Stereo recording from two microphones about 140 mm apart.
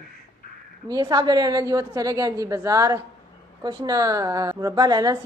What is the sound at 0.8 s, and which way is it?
A man's voice, 30° right (ahead or behind).